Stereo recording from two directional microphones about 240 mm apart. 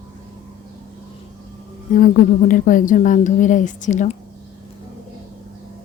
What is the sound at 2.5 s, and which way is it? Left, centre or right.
A woman's voice, left.